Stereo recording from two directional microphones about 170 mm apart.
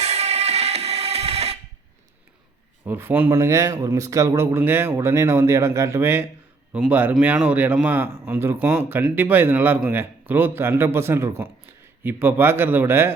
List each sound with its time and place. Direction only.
0.0 s music: 40° right (ahead or behind)
2.8 s speech: 10° right (ahead or behind)